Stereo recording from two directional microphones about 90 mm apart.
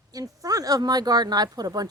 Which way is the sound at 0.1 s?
45° right (ahead or behind).